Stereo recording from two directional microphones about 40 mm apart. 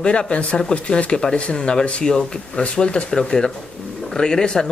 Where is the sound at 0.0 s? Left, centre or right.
Left.